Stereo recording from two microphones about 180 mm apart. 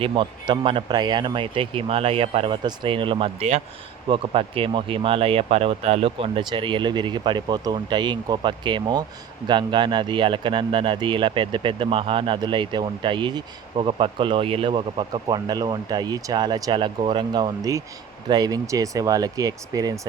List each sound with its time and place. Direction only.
0.0 s speech: 30° right (ahead or behind)